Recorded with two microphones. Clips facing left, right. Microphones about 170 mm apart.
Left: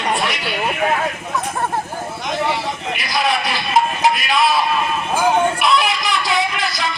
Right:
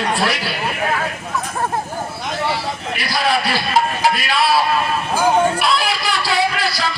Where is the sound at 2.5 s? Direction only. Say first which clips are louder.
Left 1 dB; 35° right (ahead or behind).